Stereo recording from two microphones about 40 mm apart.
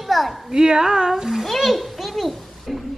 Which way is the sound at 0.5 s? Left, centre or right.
Centre.